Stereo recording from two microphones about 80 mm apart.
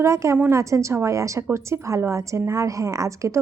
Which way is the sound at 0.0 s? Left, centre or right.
Right.